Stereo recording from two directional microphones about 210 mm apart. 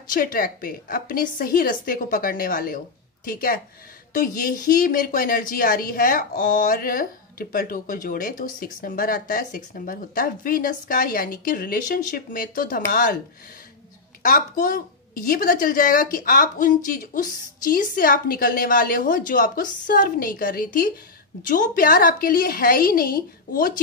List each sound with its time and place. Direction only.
0.1 s a woman's voice: 40° left (ahead or behind)
14.2 s a woman's voice: 40° left (ahead or behind)